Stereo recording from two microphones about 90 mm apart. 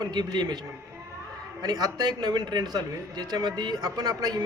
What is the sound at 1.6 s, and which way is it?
A man's voice, 45° right (ahead or behind).